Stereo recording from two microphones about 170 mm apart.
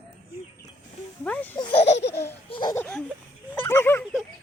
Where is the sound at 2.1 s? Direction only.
15° left (ahead or behind).